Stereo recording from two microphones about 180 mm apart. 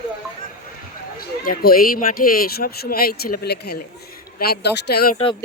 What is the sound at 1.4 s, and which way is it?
Speech, 55° left (ahead or behind).